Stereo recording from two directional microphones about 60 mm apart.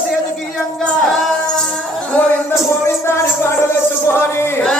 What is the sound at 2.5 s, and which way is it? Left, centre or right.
Music, left.